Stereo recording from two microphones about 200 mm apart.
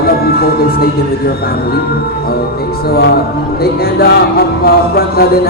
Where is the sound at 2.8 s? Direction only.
50° left (ahead or behind).